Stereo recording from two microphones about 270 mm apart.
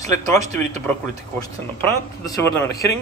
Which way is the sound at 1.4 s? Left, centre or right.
Centre.